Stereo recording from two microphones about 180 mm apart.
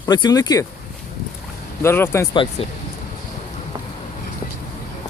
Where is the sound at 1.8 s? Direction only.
15° left (ahead or behind).